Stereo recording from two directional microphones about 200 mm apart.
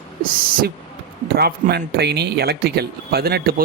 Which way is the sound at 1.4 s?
50° right (ahead or behind).